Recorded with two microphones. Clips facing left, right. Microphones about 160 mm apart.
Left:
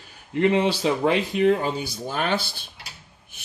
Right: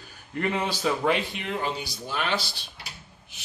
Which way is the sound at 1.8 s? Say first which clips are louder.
Left 4 dB; 50° left (ahead or behind).